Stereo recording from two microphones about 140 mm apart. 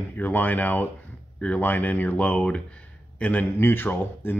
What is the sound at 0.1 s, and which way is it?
Speech, 15° left (ahead or behind).